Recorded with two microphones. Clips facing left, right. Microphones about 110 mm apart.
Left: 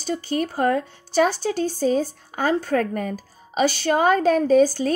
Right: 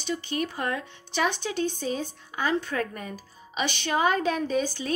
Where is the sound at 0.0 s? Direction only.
40° left (ahead or behind).